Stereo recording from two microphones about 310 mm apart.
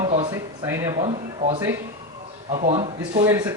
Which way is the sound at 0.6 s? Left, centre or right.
Centre.